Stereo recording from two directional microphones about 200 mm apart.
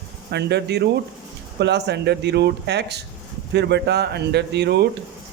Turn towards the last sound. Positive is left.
turn(degrees=-55)  # may be behind; listen again after turning